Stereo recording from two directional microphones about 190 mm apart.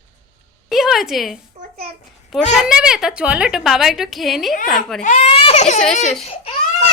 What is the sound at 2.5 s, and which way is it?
A woman's voice, 5° right (ahead or behind).